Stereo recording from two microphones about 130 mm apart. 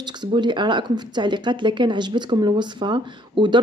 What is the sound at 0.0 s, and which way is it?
Speech, 35° right (ahead or behind).